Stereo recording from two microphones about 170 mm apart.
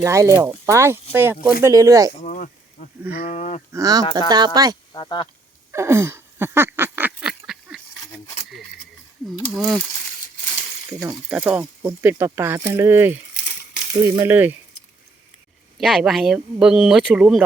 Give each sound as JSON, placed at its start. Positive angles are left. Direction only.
{"t": 0.0, "sound": "speech", "side_deg": -15}
{"t": 2.2, "sound": "a sound", "side_deg": 50}
{"t": 3.7, "sound": "speech", "side_deg": -20}
{"t": 4.9, "sound": "speech", "side_deg": 25}
{"t": 5.7, "sound": "a sound", "side_deg": -15}
{"t": 9.5, "sound": "speech", "side_deg": -5}
{"t": 11.1, "sound": "speech", "side_deg": -5}
{"t": 15.8, "sound": "speech", "side_deg": 0}